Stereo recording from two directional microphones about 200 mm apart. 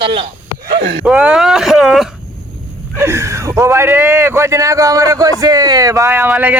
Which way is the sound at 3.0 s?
15° right (ahead or behind).